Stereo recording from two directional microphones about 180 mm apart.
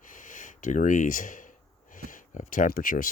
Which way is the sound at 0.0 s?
45° left (ahead or behind).